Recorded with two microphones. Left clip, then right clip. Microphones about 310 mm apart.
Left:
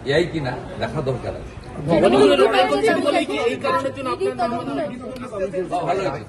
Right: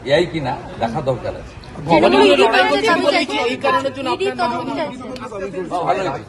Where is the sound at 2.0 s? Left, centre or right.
Right.